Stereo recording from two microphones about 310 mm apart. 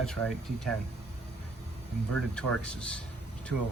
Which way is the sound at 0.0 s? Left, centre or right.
Centre.